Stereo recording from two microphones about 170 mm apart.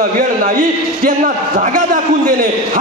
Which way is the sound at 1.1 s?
45° right (ahead or behind).